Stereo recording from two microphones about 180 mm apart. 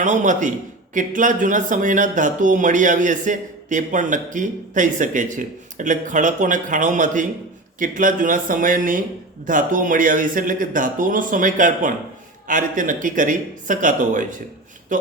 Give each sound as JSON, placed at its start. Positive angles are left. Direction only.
{"t": 0.0, "sound": "speech", "side_deg": -45}